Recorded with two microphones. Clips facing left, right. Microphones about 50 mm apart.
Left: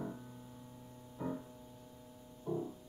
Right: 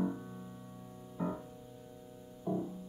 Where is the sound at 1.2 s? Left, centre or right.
Right.